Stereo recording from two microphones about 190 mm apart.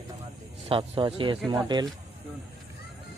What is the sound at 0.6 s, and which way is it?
Speech, 30° right (ahead or behind).